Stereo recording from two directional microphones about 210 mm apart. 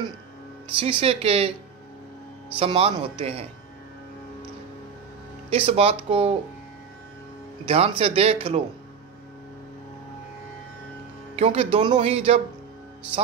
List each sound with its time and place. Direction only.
0.7 s speech: 25° right (ahead or behind)
2.6 s speech: 25° right (ahead or behind)
5.7 s speech: 25° right (ahead or behind)
7.6 s speech: 30° right (ahead or behind)
11.3 s speech: 25° right (ahead or behind)